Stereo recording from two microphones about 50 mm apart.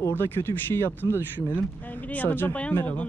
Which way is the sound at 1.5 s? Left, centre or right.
Left.